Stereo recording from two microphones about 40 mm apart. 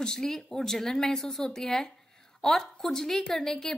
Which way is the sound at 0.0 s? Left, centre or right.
Centre.